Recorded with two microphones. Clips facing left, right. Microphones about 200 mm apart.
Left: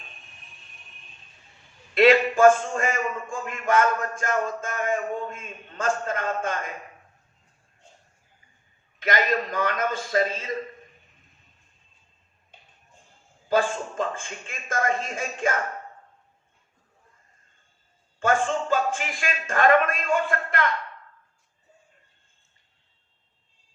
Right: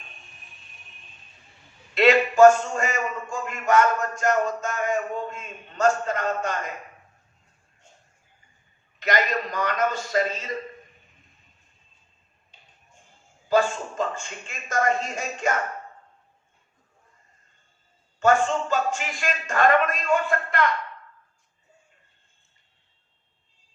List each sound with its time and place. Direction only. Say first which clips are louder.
2.0 s a man's voice: right 1 dB; 50° left (ahead or behind)
9.0 s a man's voice: even; 50° left (ahead or behind)
13.5 s a man's voice: right 2 dB; 50° left (ahead or behind)
18.2 s a man's voice: right 3 dB; 50° left (ahead or behind)